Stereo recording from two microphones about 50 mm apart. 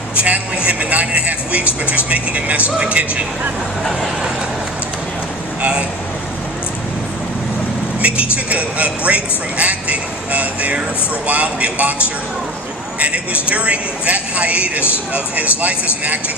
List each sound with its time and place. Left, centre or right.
0.2 s speech: right
8.0 s speech: right